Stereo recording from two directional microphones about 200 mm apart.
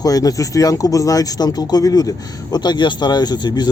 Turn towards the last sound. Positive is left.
turn(degrees=20)  # may be behind; listen again after turning